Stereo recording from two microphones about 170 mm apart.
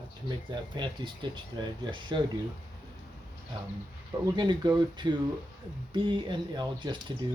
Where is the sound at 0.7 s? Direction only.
30° right (ahead or behind).